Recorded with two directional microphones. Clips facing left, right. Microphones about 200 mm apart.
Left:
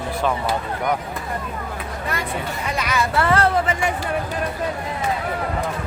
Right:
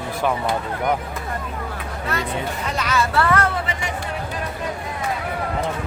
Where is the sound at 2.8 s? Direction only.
15° left (ahead or behind).